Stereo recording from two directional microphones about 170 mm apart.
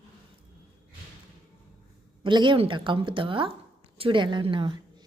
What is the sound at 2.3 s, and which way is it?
A woman's voice, 25° right (ahead or behind).